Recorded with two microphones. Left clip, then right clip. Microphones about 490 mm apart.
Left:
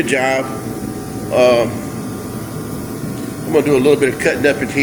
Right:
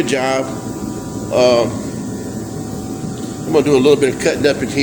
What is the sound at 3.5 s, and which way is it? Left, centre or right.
Speech, left.